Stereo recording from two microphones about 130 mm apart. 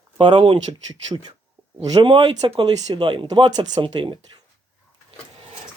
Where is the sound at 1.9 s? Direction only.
40° right (ahead or behind).